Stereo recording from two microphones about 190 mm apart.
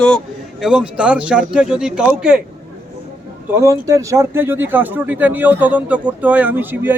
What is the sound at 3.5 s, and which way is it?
Speech, 15° right (ahead or behind).